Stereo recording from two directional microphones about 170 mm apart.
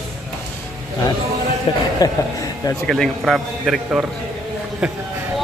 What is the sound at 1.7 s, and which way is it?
Speech, 35° left (ahead or behind).